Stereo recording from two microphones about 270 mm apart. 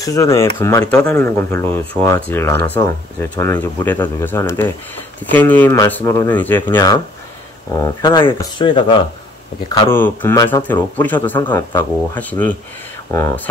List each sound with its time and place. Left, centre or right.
0.0 s speech: centre